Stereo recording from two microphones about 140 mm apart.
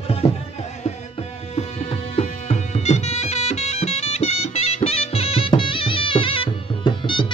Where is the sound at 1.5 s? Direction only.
45° left (ahead or behind).